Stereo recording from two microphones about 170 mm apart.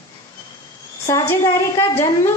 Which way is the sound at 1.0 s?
20° left (ahead or behind).